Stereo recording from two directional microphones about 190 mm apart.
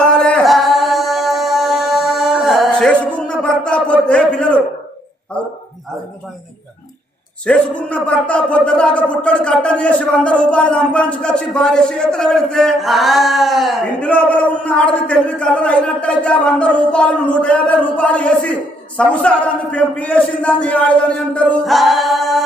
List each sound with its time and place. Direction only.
0.0 s music: 5° left (ahead or behind)
7.4 s speech: 5° left (ahead or behind)